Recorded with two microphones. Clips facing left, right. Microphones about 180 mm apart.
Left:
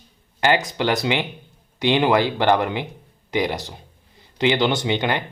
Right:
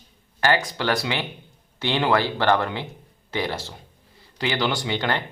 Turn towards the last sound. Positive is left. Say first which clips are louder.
# left 3 dB
turn(degrees=15)  # may be behind; listen again after turning